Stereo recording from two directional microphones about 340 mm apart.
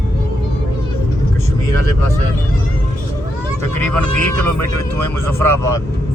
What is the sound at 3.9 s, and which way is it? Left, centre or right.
Speech, centre.